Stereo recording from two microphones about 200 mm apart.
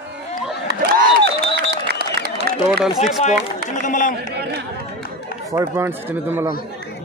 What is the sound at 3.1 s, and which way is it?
Speech, 35° left (ahead or behind).